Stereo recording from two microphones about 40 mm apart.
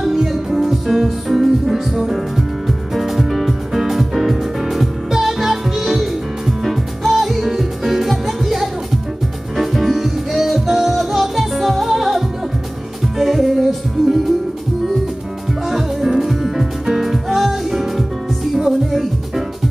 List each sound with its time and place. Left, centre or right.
0.0 s music: centre
13.2 s music: centre
15.6 s music: centre